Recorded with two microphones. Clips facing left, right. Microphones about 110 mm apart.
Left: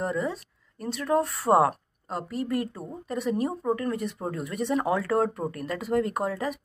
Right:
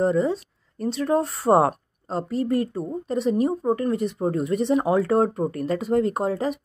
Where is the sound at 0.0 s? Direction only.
25° right (ahead or behind).